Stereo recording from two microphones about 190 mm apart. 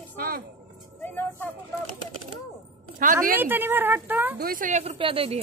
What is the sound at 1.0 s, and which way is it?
Vehicle, 10° left (ahead or behind).